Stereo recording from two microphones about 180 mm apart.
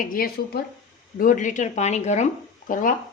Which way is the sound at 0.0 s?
50° left (ahead or behind).